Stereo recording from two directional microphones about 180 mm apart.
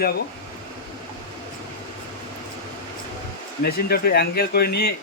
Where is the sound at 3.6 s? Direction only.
60° left (ahead or behind).